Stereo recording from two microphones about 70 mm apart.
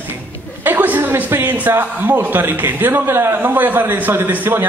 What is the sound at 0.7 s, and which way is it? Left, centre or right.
A man's voice, right.